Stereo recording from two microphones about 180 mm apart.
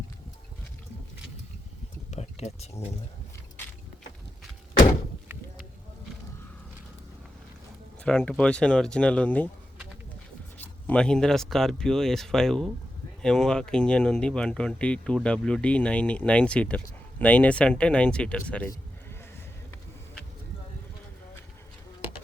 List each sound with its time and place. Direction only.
2.0 s a sound: 35° left (ahead or behind)
8.0 s speech: 10° left (ahead or behind)
10.6 s speech: 5° left (ahead or behind)